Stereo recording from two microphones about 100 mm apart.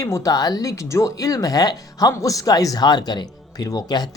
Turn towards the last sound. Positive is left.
turn(degrees=40)  # may be behind; listen again after turning